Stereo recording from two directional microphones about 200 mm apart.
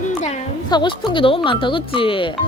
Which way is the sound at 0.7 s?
25° left (ahead or behind).